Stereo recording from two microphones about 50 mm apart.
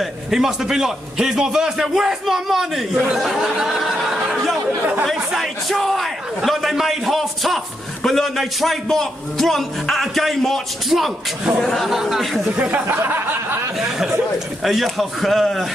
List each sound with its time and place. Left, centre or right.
0.0 s a man's voice: centre
12.5 s speech: right
13.0 s a sound: right
13.7 s a man's voice: centre